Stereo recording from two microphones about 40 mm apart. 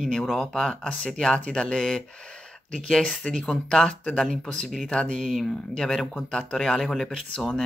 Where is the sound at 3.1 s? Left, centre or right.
Centre.